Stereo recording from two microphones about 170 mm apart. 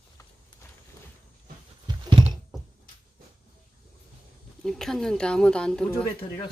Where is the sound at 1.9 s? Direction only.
25° right (ahead or behind).